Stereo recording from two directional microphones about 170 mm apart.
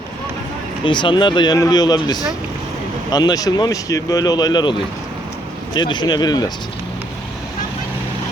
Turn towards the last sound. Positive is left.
turn(degrees=25)  # may be behind; listen again after turning